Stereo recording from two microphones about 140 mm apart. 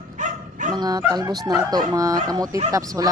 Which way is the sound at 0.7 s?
30° right (ahead or behind).